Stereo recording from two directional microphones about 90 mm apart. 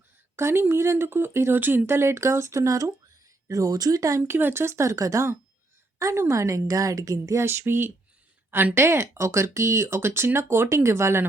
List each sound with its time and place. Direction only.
0.3 s a woman's voice: 25° right (ahead or behind)
4.2 s a woman's voice: 20° right (ahead or behind); by 7.4 s 40° right (ahead or behind)
7.4 s speech: 25° right (ahead or behind)